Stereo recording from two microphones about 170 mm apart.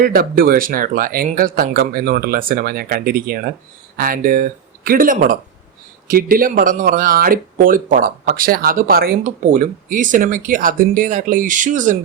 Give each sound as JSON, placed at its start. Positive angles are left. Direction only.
{"t": 0.0, "sound": "speech", "side_deg": -60}